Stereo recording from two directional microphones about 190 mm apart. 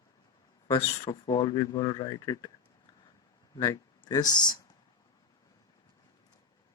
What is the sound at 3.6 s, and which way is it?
Speech, 20° left (ahead or behind).